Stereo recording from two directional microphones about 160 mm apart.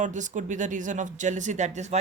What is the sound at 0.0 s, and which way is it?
Speech, 50° right (ahead or behind).